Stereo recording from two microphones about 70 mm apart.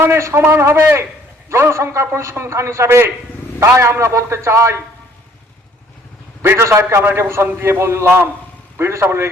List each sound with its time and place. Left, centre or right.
0.0 s a man's voice: right
6.4 s a man's voice: right